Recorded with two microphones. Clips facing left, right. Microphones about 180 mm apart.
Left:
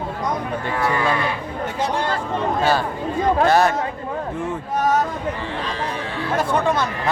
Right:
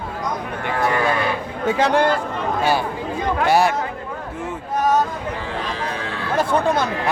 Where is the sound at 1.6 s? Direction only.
90° right.